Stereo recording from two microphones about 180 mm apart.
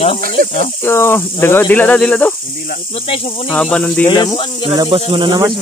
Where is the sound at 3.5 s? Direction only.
5° left (ahead or behind).